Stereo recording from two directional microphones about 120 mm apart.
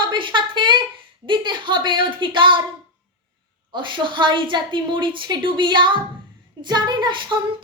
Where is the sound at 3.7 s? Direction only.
40° right (ahead or behind).